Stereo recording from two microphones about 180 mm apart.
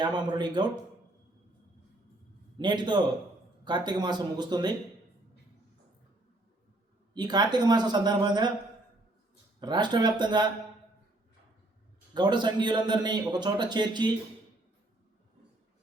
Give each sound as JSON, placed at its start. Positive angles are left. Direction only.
{"t": 0.0, "sound": "a man's voice", "side_deg": -25}
{"t": 2.6, "sound": "a man's voice", "side_deg": -25}
{"t": 7.1, "sound": "a man's voice", "side_deg": -25}
{"t": 9.6, "sound": "a man's voice", "side_deg": -25}
{"t": 12.1, "sound": "a man's voice", "side_deg": -25}